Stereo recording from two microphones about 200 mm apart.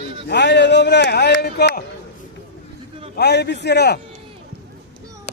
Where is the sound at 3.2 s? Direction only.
55° left (ahead or behind).